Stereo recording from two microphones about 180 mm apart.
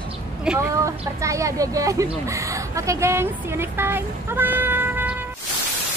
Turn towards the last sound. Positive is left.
turn(degrees=-10)  # may be behind; listen again after turning